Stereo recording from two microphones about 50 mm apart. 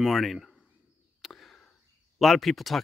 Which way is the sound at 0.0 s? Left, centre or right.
Centre.